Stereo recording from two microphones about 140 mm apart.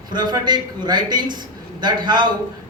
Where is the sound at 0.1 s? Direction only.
30° right (ahead or behind).